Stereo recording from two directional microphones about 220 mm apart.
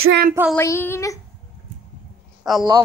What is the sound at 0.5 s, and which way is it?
Speech, 10° left (ahead or behind).